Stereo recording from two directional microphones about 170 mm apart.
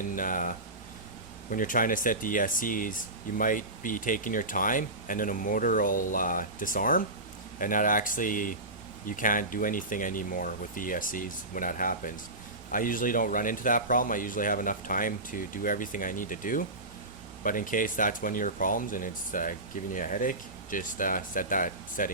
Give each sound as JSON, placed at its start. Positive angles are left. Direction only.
{"t": 0.0, "sound": "speech", "side_deg": 50}